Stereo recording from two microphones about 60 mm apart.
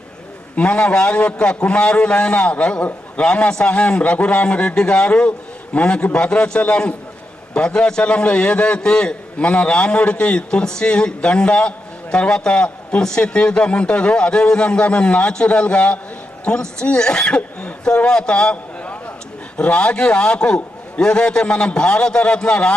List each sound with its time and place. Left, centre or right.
0.5 s a man's voice: centre